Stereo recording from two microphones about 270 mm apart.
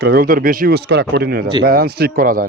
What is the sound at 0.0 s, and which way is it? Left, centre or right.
A man's voice, right.